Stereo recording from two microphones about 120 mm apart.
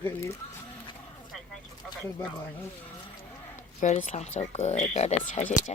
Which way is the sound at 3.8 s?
85° left.